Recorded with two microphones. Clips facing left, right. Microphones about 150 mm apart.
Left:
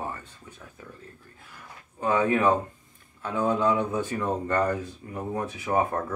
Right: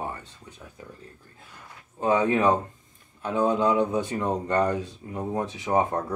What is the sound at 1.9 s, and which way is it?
Speech, 25° right (ahead or behind).